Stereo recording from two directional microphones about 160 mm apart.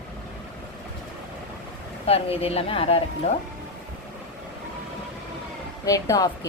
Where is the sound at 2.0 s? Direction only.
40° left (ahead or behind).